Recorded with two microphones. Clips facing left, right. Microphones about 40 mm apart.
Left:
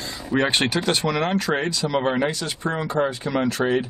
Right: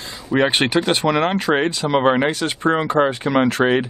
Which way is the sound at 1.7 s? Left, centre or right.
Right.